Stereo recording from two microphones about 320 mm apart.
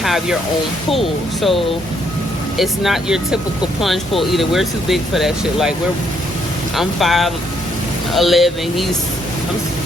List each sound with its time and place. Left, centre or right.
0.0 s speech: centre
6.7 s speech: centre